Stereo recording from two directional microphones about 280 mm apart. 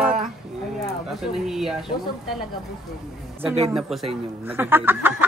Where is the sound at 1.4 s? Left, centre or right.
Centre.